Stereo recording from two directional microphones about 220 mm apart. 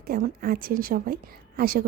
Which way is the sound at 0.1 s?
40° right (ahead or behind).